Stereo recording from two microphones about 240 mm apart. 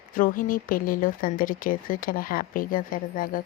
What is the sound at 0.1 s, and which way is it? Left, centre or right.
Speech, left.